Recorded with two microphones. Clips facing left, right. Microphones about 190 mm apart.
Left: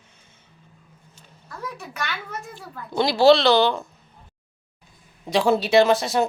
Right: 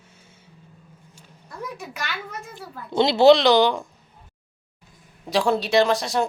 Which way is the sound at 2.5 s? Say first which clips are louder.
Right 3 dB; 25° right (ahead or behind).